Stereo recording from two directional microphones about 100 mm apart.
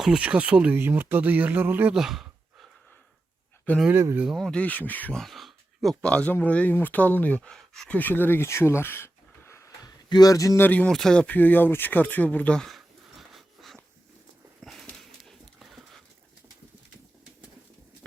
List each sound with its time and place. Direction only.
0.0 s speech: 10° right (ahead or behind)
1.9 s a sound: 5° right (ahead or behind)
3.9 s speech: 25° right (ahead or behind)
4.4 s speech: 5° left (ahead or behind)
4.6 s speech: 15° left (ahead or behind)
5.1 s speech: centre (ahead or behind)
7.5 s speech: 5° left (ahead or behind)
7.9 s speech: 20° left (ahead or behind)
9.8 s a sound: 40° left (ahead or behind)
10.6 s speech: 15° left (ahead or behind)
14.6 s a sound: centre (ahead or behind)
15.2 s dog: centre (ahead or behind)